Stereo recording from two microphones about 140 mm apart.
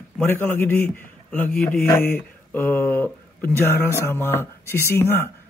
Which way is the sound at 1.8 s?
15° left (ahead or behind).